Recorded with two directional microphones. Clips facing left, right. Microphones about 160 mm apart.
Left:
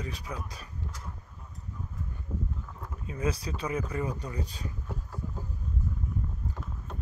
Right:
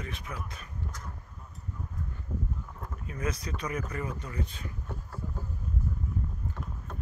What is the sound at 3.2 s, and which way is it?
Speech, 30° left (ahead or behind).